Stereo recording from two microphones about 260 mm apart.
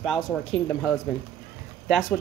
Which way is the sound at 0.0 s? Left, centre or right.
Centre.